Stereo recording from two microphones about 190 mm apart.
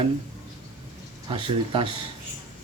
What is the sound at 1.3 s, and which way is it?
Speech, 25° right (ahead or behind).